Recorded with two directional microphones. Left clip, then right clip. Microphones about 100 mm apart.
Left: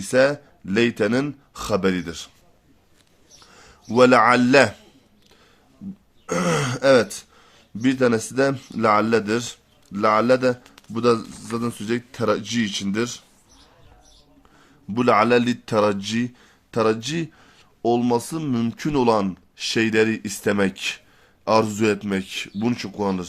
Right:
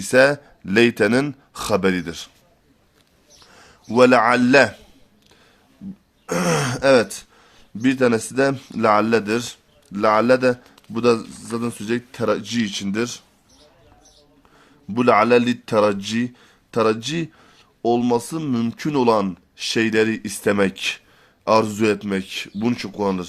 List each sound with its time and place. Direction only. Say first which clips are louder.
0.0 s speech: right 3 dB; 40° right (ahead or behind); by 2.3 s 25° right (ahead or behind)
3.4 s speech: right 1 dB; 15° right (ahead or behind)
6.2 s a man's voice: right 1 dB; 30° right (ahead or behind)
14.8 s a man's voice: right 2 dB; 20° right (ahead or behind)